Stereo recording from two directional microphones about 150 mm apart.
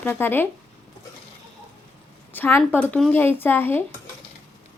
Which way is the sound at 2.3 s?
15° left (ahead or behind).